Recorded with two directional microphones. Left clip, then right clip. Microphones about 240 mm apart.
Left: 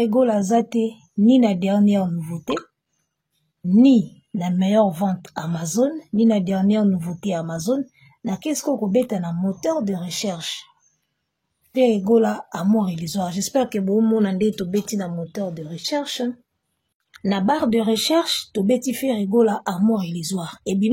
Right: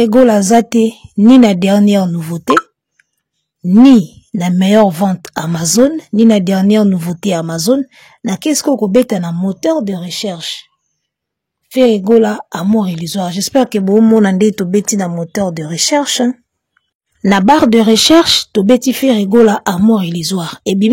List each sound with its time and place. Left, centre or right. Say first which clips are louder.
0.0 s speech: right 10 dB; right
4.4 s speech: right 8 dB; right
11.7 s speech: right 8 dB; right